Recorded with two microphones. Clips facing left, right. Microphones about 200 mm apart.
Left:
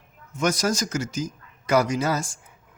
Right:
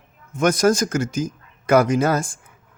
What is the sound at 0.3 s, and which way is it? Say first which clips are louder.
Speech: right 7 dB; 55° right (ahead or behind).